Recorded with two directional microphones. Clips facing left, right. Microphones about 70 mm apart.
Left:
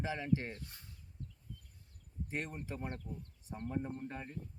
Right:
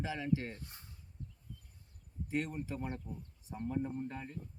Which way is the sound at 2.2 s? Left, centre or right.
Left.